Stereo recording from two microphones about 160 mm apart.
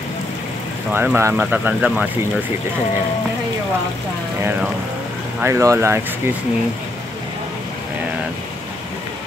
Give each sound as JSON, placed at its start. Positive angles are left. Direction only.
{"t": 0.9, "sound": "speech", "side_deg": -15}
{"t": 5.4, "sound": "speech", "side_deg": -20}